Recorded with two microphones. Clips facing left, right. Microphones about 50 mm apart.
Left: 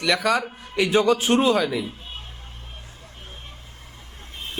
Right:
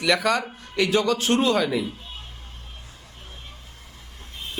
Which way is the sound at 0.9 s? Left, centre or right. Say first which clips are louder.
Left 3 dB; centre.